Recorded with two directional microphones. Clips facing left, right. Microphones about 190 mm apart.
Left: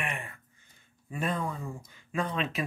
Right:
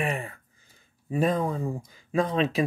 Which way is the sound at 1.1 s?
35° right (ahead or behind).